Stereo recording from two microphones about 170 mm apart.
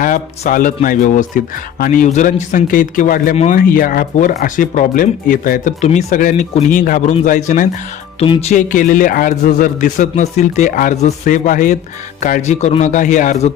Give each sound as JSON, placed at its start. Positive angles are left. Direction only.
{"t": 0.0, "sound": "speech", "side_deg": 50}
{"t": 8.2, "sound": "speech", "side_deg": 35}